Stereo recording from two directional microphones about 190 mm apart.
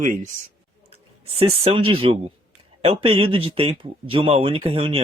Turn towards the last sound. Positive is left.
turn(degrees=-30)  # may be behind; listen again after turning